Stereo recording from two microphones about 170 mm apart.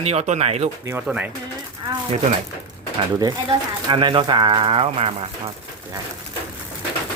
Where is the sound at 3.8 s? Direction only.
30° right (ahead or behind).